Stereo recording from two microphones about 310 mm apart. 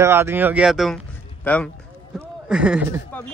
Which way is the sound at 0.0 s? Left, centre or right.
Centre.